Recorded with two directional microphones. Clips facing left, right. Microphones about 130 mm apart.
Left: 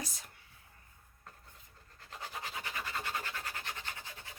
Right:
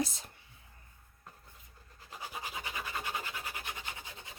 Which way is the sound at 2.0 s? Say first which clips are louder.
Right 1 dB; 10° right (ahead or behind).